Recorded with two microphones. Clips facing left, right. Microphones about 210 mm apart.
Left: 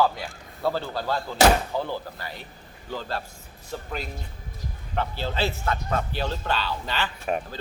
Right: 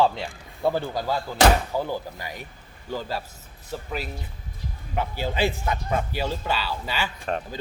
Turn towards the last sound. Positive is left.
turn(degrees=-10)  # may be behind; listen again after turning